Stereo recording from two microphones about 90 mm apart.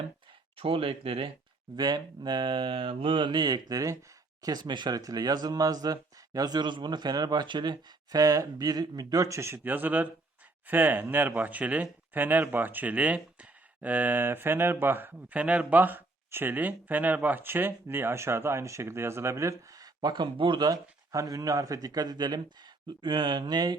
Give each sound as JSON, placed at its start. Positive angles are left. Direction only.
{"t": 0.5, "sound": "speech", "side_deg": -90}
{"t": 1.7, "sound": "speech", "side_deg": -55}
{"t": 4.4, "sound": "speech", "side_deg": -55}
{"t": 20.7, "sound": "speech", "side_deg": -40}
{"t": 23.0, "sound": "speech", "side_deg": -65}